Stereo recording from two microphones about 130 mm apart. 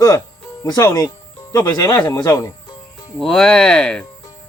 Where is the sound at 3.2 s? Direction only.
5° left (ahead or behind).